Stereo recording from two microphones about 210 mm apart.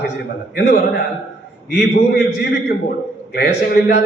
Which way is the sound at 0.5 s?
45° left (ahead or behind).